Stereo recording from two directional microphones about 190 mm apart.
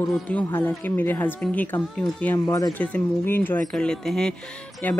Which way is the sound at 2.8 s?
10° left (ahead or behind).